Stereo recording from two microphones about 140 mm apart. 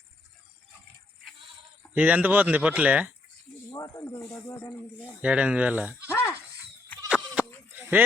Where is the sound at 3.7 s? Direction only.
25° left (ahead or behind).